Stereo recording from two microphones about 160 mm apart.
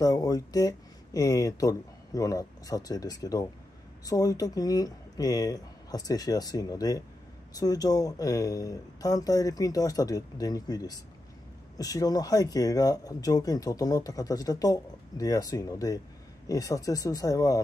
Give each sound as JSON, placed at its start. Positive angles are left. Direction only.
{"t": 0.0, "sound": "speech", "side_deg": 20}